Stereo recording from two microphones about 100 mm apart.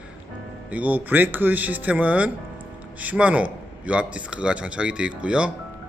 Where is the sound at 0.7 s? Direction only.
15° right (ahead or behind).